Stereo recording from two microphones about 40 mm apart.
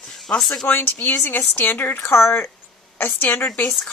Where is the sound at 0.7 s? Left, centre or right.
Left.